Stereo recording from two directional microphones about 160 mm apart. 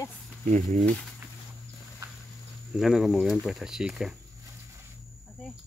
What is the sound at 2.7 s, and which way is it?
Speech, centre (ahead or behind).